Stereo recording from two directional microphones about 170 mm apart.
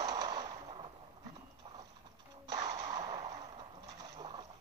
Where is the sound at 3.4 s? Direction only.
25° right (ahead or behind).